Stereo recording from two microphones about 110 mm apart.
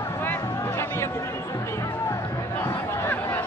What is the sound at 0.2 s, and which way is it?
Music, 20° left (ahead or behind).